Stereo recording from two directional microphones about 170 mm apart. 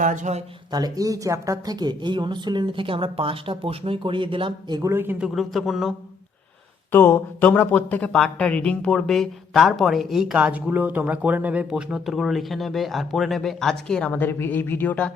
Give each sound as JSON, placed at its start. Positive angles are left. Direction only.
{"t": 0.0, "sound": "speech", "side_deg": -50}
{"t": 0.7, "sound": "speech", "side_deg": -20}
{"t": 4.8, "sound": "speech", "side_deg": -15}
{"t": 5.3, "sound": "speech", "side_deg": 0}
{"t": 6.9, "sound": "speech", "side_deg": 10}